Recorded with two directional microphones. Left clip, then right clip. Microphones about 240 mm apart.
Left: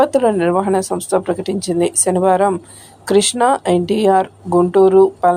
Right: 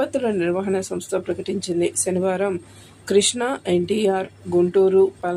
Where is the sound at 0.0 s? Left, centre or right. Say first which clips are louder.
Left 8 dB; centre.